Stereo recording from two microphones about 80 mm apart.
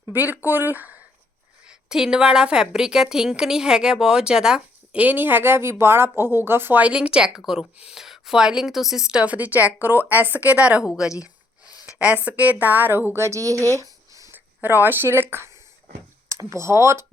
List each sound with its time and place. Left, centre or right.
0.1 s a woman's voice: right
1.6 s a woman's voice: centre
11.9 s a woman's voice: centre
13.2 s speech: right
14.1 s a sound: right
14.3 s speech: right